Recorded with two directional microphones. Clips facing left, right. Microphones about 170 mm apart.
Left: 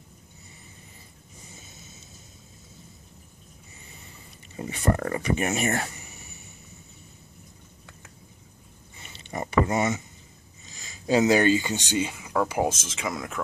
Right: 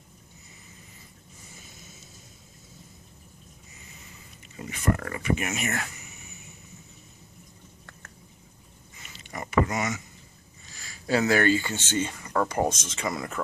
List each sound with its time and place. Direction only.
4.6 s speech: 30° left (ahead or behind)
8.9 s a sound: 30° left (ahead or behind)
10.7 s speech: 20° left (ahead or behind); by 13.4 s centre (ahead or behind)